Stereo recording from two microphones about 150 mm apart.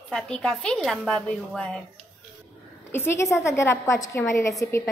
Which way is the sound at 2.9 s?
15° left (ahead or behind).